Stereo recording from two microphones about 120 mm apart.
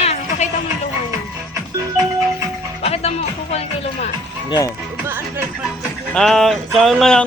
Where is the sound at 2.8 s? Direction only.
60° left (ahead or behind).